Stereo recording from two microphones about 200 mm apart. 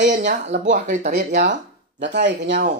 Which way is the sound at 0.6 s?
40° right (ahead or behind).